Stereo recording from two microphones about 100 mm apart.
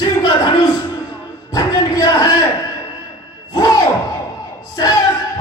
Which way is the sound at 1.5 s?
40° left (ahead or behind).